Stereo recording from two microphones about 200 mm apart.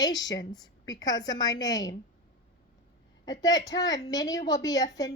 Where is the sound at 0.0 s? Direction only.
20° left (ahead or behind).